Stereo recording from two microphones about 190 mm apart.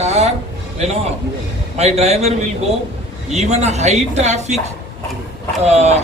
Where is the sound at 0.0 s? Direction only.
35° right (ahead or behind).